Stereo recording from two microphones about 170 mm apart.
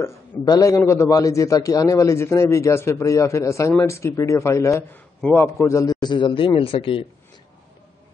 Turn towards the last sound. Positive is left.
turn(degrees=35)  # may be behind; listen again after turning